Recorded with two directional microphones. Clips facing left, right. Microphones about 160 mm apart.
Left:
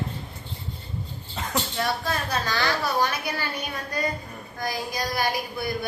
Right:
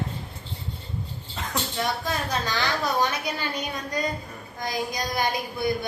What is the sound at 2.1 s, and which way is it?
A woman's voice, 15° right (ahead or behind).